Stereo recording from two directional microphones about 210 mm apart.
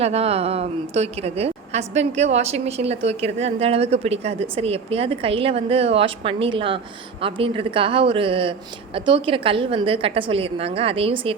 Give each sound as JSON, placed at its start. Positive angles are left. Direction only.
{"t": 0.0, "sound": "a woman's voice", "side_deg": -30}